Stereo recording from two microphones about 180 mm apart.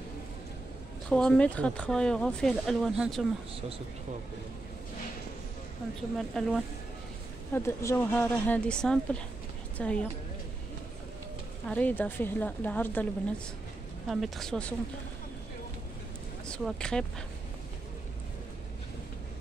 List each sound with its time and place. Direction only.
1.1 s speech: 5° left (ahead or behind)
6.1 s speech: centre (ahead or behind)
7.5 s speech: 15° left (ahead or behind)
11.7 s speech: 10° left (ahead or behind)
16.4 s speech: 5° left (ahead or behind)